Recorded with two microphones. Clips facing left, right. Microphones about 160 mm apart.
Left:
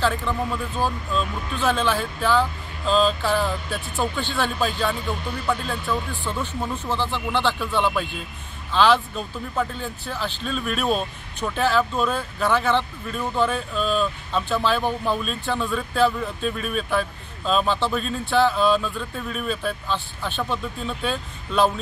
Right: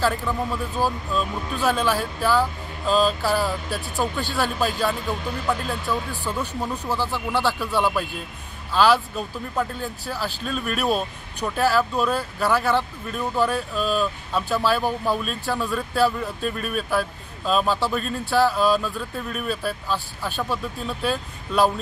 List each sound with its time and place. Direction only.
0.0 s speech: 5° right (ahead or behind)
3.9 s speech: 40° right (ahead or behind)
4.4 s speech: 10° right (ahead or behind)